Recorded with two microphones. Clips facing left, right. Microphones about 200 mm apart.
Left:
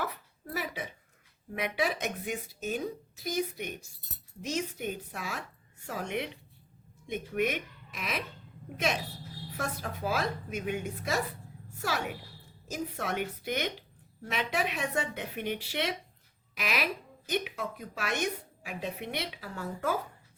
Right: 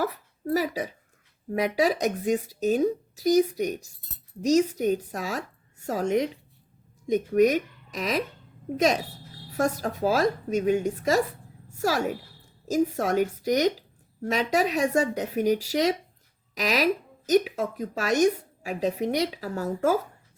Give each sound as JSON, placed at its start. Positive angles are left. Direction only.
{"t": 0.5, "sound": "a woman's voice", "side_deg": -35}
{"t": 9.6, "sound": "a woman's voice", "side_deg": -45}